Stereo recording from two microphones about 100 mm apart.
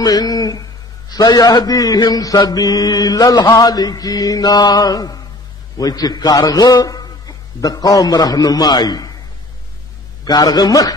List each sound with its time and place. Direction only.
0.0 s a man's voice: 40° left (ahead or behind)
10.2 s a man's voice: 40° left (ahead or behind)